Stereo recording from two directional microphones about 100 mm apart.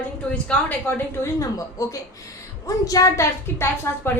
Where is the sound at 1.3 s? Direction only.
35° left (ahead or behind).